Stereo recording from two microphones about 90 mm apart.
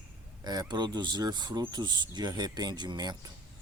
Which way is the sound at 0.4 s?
50° right (ahead or behind).